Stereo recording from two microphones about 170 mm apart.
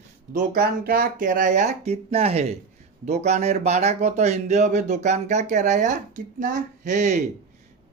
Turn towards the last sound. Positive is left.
turn(degrees=-45)  # may be behind; listen again after turning